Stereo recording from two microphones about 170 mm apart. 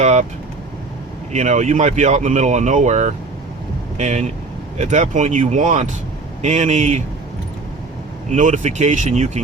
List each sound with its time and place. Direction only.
0.0 s speech: 40° right (ahead or behind)
1.3 s speech: 45° right (ahead or behind)
8.3 s speech: 45° right (ahead or behind)